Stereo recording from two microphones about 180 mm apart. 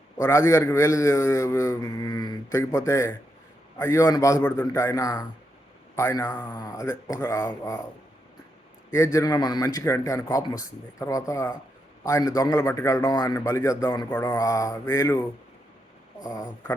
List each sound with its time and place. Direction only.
0.2 s a man's voice: 15° left (ahead or behind)
6.4 s speech: 25° left (ahead or behind)
9.1 s a man's voice: 20° left (ahead or behind)